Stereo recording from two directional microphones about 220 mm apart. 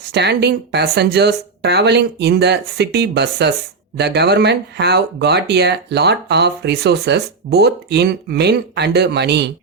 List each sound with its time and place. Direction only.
0.1 s speech: 50° right (ahead or behind)